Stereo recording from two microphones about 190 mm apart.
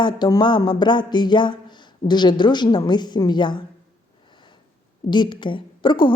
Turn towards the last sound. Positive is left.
turn(degrees=25)  # may be behind; listen again after turning